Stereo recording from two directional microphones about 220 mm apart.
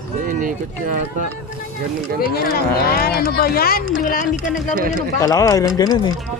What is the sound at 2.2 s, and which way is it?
Speech, 45° left (ahead or behind).